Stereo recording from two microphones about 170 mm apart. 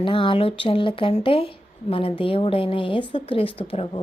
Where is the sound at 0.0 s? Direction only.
30° left (ahead or behind).